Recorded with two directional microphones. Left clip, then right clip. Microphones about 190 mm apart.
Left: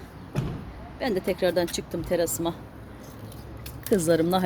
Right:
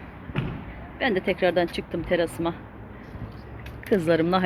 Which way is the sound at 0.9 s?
15° left (ahead or behind).